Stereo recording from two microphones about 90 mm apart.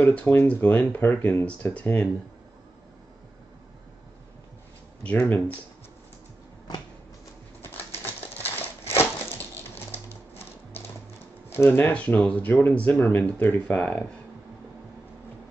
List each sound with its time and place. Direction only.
0.0 s speech: 15° left (ahead or behind)
5.0 s speech: 15° left (ahead or behind)
7.6 s typewriter: 25° left (ahead or behind)
8.9 s a sound: 25° left (ahead or behind)
11.5 s speech: 25° left (ahead or behind)